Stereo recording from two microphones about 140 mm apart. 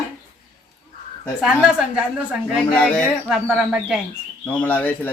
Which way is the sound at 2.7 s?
10° left (ahead or behind).